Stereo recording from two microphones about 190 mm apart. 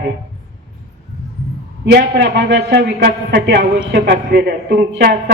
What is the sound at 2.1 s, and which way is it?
A woman's voice, 65° right (ahead or behind).